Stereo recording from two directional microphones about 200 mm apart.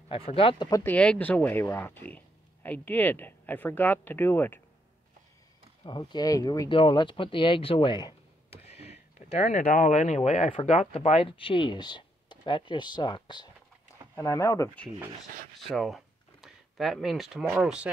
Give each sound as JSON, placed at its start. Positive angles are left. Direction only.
{"t": 0.1, "sound": "speech", "side_deg": 30}
{"t": 0.9, "sound": "speech", "side_deg": 5}
{"t": 5.9, "sound": "speech", "side_deg": 20}
{"t": 15.7, "sound": "speech", "side_deg": 0}